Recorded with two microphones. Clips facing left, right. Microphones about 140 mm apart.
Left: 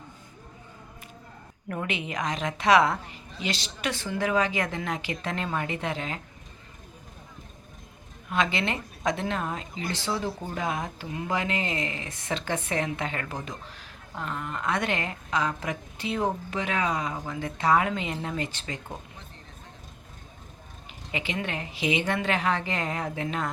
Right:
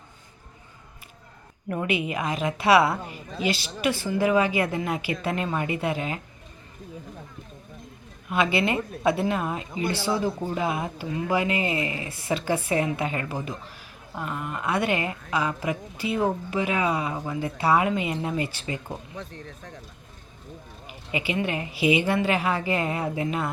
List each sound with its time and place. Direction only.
1.7 s a woman's voice: 10° right (ahead or behind)
8.3 s a woman's voice: 10° right (ahead or behind)
19.1 s speech: 90° right
21.1 s a woman's voice: 10° right (ahead or behind)